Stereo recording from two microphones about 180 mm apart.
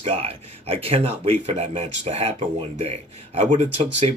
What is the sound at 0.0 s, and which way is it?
Speech, 35° right (ahead or behind).